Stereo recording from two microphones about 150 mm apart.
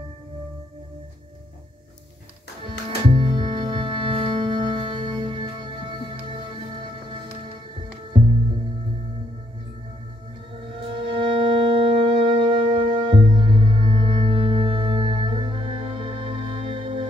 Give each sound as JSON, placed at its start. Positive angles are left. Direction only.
{"t": 3.1, "sound": "music", "side_deg": -30}
{"t": 10.9, "sound": "music", "side_deg": -35}